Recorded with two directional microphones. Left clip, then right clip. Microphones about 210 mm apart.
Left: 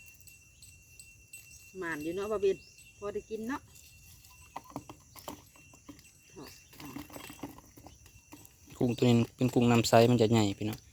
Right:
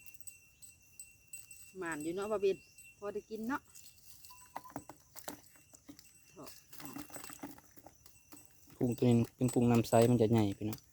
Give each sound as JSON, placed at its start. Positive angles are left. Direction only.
{"t": 1.8, "sound": "speech", "side_deg": -25}
{"t": 4.7, "sound": "a sound", "side_deg": -15}
{"t": 8.7, "sound": "speech", "side_deg": -5}